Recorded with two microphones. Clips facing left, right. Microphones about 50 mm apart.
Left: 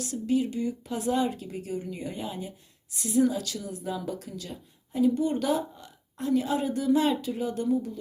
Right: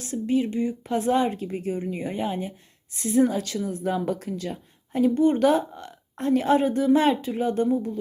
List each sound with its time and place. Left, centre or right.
0.0 s a woman's voice: right